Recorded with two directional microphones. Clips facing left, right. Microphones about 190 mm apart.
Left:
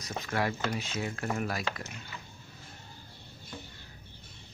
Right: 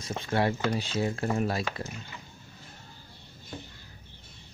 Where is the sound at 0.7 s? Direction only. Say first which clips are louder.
Right 6 dB; 30° right (ahead or behind).